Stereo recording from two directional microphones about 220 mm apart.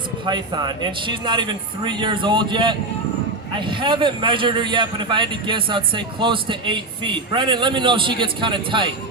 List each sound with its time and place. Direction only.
0.3 s a man's voice: 20° right (ahead or behind)